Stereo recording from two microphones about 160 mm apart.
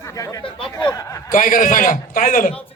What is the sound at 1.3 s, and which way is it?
A man's voice, 55° left (ahead or behind).